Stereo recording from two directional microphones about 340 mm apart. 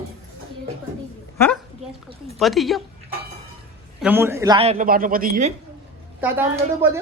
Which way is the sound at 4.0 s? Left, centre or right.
Centre.